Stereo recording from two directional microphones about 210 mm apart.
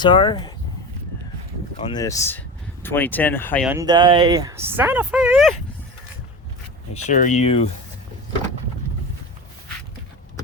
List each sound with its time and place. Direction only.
0.0 s speech: 20° left (ahead or behind)
1.7 s speech: 20° left (ahead or behind)
3.7 s speech: 15° right (ahead or behind)
7.1 s speech: 35° left (ahead or behind)